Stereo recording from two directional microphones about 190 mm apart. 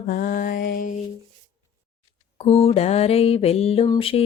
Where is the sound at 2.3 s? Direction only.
30° left (ahead or behind).